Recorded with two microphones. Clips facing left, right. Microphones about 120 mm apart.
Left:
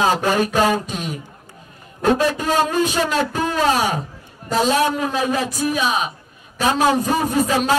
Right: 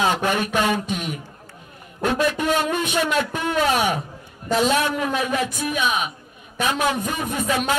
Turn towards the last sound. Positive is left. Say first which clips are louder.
# left 5 dB
turn(degrees=35)  # may be behind; listen again after turning